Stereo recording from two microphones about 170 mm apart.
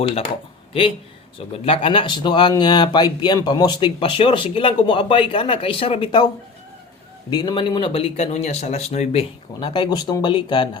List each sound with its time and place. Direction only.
0.7 s speech: 30° left (ahead or behind)
7.3 s speech: 25° left (ahead or behind); by 9.2 s 40° left (ahead or behind)
9.6 s speech: 25° left (ahead or behind)